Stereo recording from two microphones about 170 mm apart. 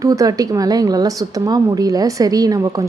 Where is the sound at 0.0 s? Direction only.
20° right (ahead or behind).